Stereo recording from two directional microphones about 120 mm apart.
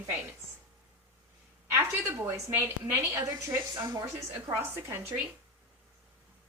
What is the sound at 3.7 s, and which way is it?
Speech, 40° right (ahead or behind).